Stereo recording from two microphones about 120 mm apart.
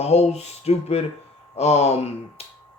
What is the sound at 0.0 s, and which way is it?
Speech, 60° left (ahead or behind).